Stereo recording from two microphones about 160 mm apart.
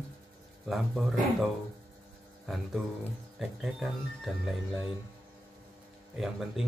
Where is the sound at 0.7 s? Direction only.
Centre (ahead or behind).